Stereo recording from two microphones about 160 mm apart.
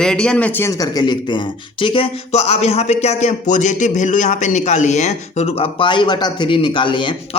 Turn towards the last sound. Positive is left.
turn(degrees=30)  # may be behind; listen again after turning